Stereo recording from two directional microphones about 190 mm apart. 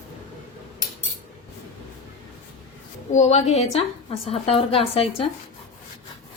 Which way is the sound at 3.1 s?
35° left (ahead or behind).